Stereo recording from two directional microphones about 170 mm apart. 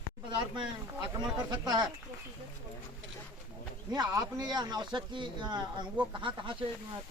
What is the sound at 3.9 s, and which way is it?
Speech, 25° right (ahead or behind).